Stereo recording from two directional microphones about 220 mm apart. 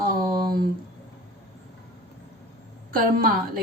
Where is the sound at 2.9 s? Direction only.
40° right (ahead or behind).